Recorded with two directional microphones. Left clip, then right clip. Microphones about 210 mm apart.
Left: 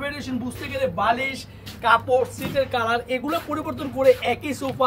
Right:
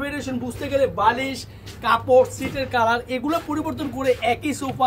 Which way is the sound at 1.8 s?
20° right (ahead or behind).